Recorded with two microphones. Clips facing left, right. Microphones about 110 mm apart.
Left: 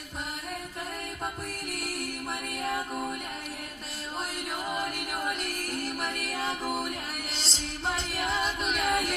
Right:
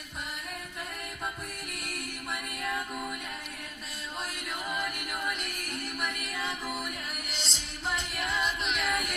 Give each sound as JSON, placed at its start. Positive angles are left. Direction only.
{"t": 2.6, "sound": "music", "side_deg": 30}
{"t": 4.6, "sound": "music", "side_deg": 30}